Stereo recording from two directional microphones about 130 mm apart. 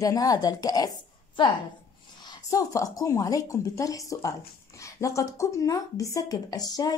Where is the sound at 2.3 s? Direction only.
25° left (ahead or behind).